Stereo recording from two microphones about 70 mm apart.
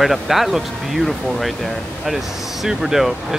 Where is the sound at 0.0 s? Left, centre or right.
Centre.